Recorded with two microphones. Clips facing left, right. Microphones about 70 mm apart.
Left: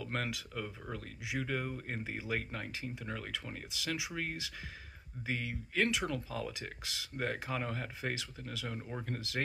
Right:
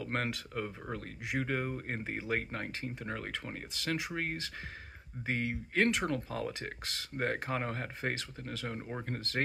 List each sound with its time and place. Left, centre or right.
0.0 s speech: right